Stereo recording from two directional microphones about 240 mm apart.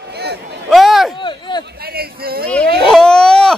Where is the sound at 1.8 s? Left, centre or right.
Right.